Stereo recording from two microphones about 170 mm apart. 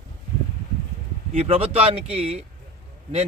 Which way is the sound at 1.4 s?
35° right (ahead or behind).